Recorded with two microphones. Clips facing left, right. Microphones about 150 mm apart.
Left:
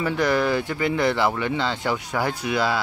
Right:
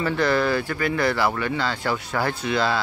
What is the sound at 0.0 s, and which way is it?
Speech, 15° left (ahead or behind).